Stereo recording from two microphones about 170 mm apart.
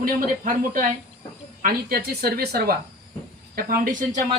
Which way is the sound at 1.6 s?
60° right (ahead or behind).